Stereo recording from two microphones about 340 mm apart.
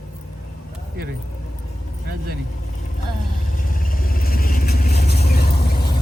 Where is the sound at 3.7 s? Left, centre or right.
Left.